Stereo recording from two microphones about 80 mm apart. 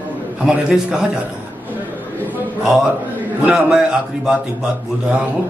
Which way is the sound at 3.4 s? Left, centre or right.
Centre.